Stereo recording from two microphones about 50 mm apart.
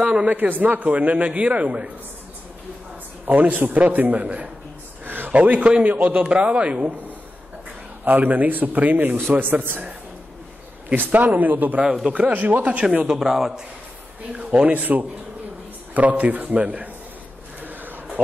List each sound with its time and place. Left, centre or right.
0.3 s a man's voice: right
3.3 s a man's voice: right
8.0 s a man's voice: right
11.0 s a man's voice: right
13.2 s a man's voice: centre
14.3 s a man's voice: right
17.6 s a sound: right